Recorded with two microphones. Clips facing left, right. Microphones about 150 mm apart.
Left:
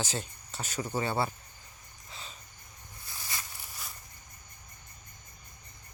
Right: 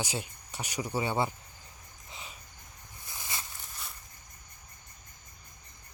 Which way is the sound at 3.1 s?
20° right (ahead or behind).